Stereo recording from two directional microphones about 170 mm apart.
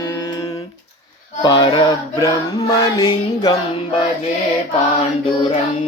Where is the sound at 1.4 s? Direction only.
25° left (ahead or behind).